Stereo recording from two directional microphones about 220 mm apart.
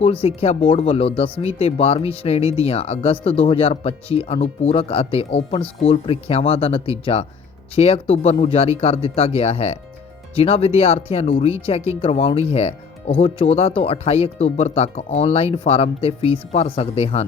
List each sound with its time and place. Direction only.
0.0 s speech: 25° left (ahead or behind)